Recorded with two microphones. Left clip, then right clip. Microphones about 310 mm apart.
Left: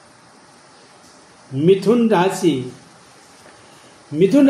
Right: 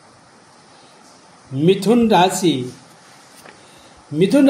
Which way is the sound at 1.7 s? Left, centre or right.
Right.